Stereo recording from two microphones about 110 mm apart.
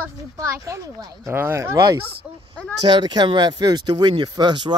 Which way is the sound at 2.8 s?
40° right (ahead or behind).